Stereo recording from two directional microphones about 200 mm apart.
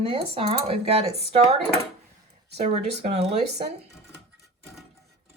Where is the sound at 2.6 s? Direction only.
30° right (ahead or behind).